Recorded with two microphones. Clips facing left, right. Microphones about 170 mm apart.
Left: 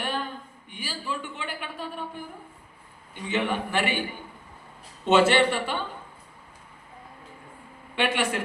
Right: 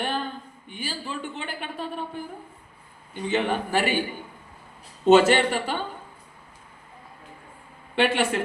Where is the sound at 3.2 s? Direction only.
35° right (ahead or behind).